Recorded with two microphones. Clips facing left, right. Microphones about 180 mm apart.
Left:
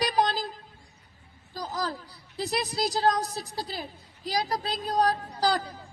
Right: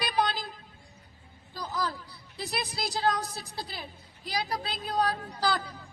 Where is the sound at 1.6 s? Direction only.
40° left (ahead or behind).